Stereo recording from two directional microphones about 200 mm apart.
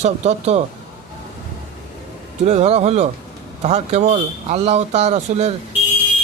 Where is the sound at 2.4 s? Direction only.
35° right (ahead or behind).